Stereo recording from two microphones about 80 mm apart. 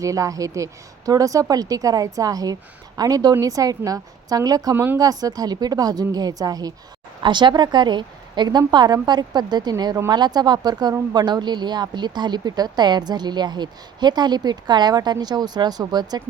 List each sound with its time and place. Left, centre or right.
0.0 s a woman's voice: right
4.7 s speech: right
4.9 s a woman's voice: right
7.2 s speech: right
8.4 s speech: right